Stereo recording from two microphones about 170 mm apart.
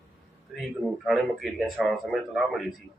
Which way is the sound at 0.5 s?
Centre (ahead or behind).